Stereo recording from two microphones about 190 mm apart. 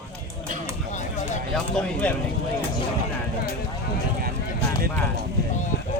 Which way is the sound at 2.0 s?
5° left (ahead or behind).